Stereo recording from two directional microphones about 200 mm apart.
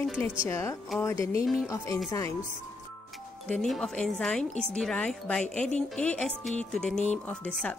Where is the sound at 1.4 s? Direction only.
5° right (ahead or behind).